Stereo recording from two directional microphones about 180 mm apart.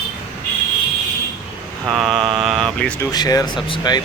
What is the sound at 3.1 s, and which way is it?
Speech, 20° left (ahead or behind).